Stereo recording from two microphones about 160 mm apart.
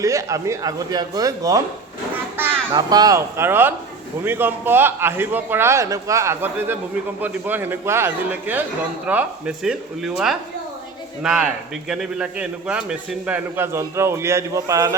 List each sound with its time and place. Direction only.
0.0 s a man's voice: 20° right (ahead or behind)
2.3 s children playing: 10° right (ahead or behind)
2.7 s a man's voice: 25° right (ahead or behind)